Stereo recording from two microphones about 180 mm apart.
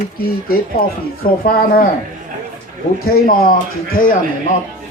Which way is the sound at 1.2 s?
55° left (ahead or behind).